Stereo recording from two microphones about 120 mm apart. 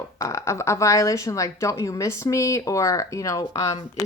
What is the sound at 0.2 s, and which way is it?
Speech, 25° left (ahead or behind).